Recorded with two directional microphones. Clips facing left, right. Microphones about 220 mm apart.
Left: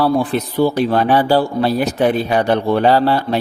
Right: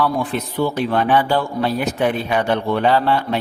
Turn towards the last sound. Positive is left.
turn(degrees=35)  # may be behind; listen again after turning